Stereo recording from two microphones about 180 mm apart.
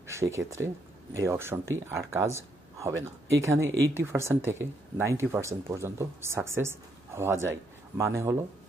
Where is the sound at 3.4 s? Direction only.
15° right (ahead or behind).